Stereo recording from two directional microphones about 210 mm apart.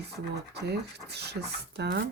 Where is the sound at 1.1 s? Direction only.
50° right (ahead or behind).